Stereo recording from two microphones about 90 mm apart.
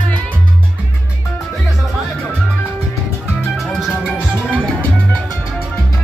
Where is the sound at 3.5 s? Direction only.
Centre (ahead or behind).